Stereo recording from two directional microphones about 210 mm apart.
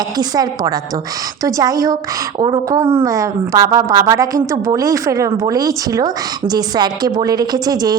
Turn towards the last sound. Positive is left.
turn(degrees=-20)  # may be behind; listen again after turning